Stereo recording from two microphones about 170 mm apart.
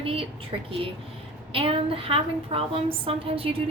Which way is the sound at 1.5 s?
35° right (ahead or behind).